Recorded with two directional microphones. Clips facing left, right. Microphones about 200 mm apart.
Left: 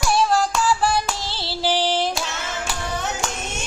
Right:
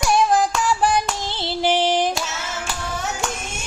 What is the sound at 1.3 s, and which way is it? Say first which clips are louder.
Female singing: right 4 dB; 20° right (ahead or behind).